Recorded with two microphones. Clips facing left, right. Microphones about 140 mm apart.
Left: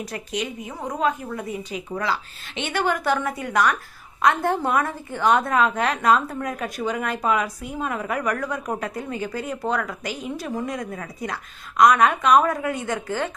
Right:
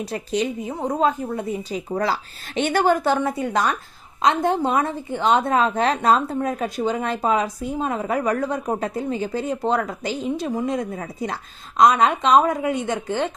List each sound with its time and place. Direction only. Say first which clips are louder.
0.0 s a woman's voice: right 5 dB; 30° right (ahead or behind)